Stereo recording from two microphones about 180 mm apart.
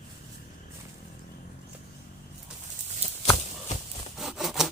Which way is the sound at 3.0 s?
35° right (ahead or behind).